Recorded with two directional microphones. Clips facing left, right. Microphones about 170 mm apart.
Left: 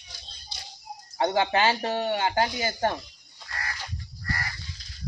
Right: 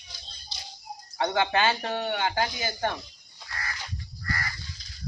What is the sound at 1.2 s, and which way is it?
Speech, 30° left (ahead or behind).